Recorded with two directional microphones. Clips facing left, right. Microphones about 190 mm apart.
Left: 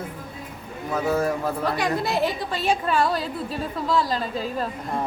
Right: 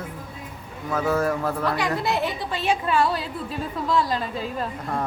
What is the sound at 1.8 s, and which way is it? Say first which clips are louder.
A woman's voice: left 1 dB; 40° left (ahead or behind).